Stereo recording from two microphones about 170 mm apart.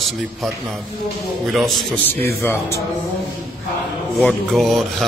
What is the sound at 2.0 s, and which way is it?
Speech, 10° left (ahead or behind).